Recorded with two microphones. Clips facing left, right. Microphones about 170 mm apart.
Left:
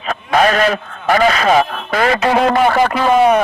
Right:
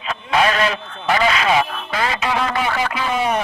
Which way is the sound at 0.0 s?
45° left (ahead or behind).